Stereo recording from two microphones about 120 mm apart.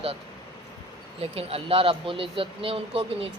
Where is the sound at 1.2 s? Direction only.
55° right (ahead or behind).